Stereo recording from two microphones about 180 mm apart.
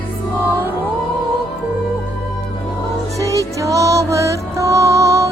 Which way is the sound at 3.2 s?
15° right (ahead or behind).